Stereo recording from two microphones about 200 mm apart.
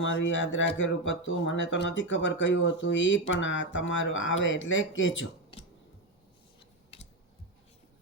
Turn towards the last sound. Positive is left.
turn(degrees=30)  # may be behind; listen again after turning